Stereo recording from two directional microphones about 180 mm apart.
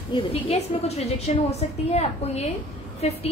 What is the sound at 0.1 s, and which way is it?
A woman's voice, 30° left (ahead or behind).